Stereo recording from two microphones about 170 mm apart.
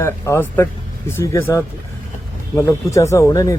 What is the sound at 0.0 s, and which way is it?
Speech, 15° left (ahead or behind).